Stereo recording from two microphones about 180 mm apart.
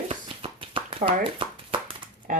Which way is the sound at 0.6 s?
30° right (ahead or behind).